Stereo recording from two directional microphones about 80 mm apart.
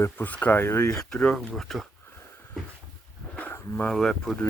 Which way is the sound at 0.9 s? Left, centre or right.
Centre.